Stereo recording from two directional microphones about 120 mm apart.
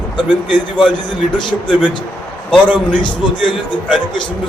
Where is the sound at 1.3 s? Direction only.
40° left (ahead or behind).